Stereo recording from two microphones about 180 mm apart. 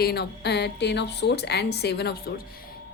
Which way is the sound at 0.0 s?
65° left (ahead or behind).